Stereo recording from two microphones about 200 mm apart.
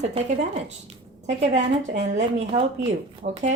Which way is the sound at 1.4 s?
35° right (ahead or behind).